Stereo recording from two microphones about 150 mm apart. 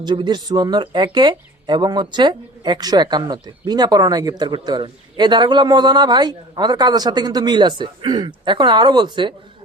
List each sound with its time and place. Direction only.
0.0 s speech: 30° right (ahead or behind)